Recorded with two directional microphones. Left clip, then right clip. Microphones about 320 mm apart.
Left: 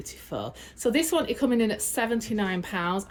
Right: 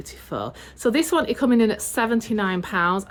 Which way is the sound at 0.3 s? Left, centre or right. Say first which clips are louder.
Right 5 dB; right.